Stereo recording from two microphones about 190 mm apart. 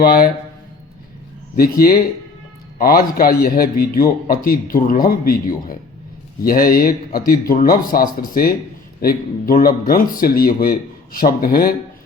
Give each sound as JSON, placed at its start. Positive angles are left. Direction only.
{"t": 0.0, "sound": "speech", "side_deg": 50}
{"t": 1.5, "sound": "speech", "side_deg": 50}